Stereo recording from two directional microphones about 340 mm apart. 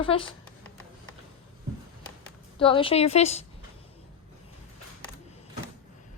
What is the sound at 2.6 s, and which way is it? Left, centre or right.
Speech, centre.